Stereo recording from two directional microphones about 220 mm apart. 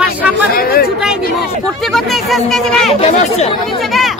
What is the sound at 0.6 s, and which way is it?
Speech, 45° left (ahead or behind).